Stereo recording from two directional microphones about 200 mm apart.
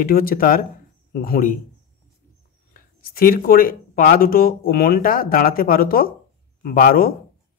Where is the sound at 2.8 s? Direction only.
45° left (ahead or behind).